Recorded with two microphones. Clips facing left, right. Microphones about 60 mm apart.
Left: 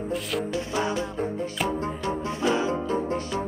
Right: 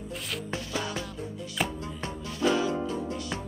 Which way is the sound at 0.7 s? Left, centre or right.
Left.